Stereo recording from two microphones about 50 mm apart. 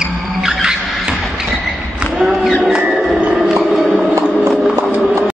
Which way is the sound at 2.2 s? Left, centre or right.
Centre.